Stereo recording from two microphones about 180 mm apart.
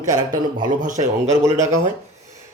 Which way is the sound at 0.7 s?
45° right (ahead or behind).